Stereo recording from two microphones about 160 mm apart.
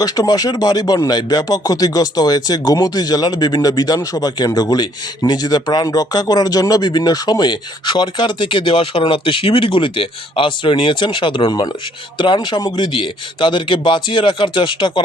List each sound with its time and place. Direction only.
0.0 s speech: 25° left (ahead or behind)